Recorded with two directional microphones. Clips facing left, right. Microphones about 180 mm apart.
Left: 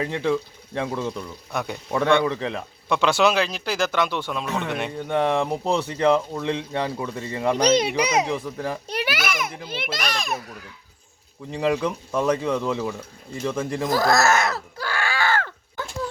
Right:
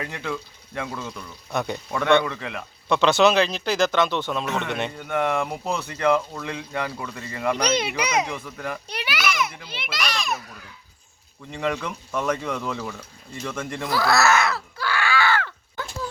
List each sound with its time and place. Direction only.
0.0 s speech: 30° left (ahead or behind)
2.9 s speech: 10° left (ahead or behind)
4.9 s speech: 30° left (ahead or behind)
8.9 s babbling: 45° left (ahead or behind)
9.6 s a child's voice: 50° left (ahead or behind)
11.5 s speech: 30° left (ahead or behind)
13.9 s a sound: 45° left (ahead or behind)